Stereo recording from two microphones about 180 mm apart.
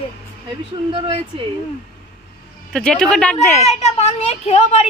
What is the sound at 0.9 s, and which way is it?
Speech, 30° right (ahead or behind).